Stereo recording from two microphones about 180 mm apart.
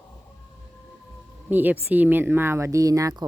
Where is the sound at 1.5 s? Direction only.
10° right (ahead or behind).